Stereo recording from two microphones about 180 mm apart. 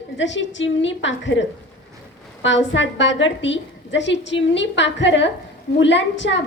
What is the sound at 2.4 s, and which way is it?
A woman's voice, 90° left.